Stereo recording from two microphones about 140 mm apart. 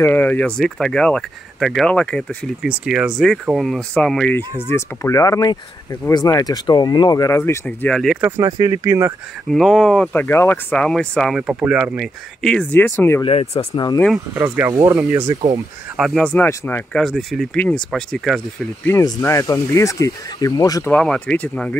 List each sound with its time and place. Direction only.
0.0 s speech: 15° left (ahead or behind)
2.6 s speech: 5° right (ahead or behind)
8.2 s speech: 20° right (ahead or behind)
9.5 s speech: centre (ahead or behind); by 13.2 s 15° left (ahead or behind)
13.2 s speech: 45° left (ahead or behind)
14.7 s speech: 20° right (ahead or behind)
16.0 s speech: centre (ahead or behind)
17.0 s speech: centre (ahead or behind)
19.0 s speech: 25° left (ahead or behind)
20.9 s speech: 5° left (ahead or behind)